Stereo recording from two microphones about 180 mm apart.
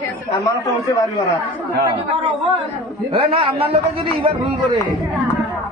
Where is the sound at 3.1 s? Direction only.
30° right (ahead or behind).